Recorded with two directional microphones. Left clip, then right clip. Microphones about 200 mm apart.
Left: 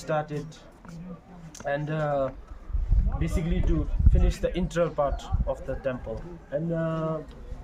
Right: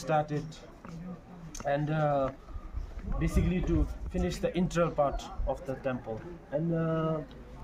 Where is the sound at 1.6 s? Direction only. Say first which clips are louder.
Left 1 dB; 10° left (ahead or behind).